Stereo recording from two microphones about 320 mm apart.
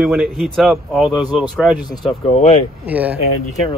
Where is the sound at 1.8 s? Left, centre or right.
Centre.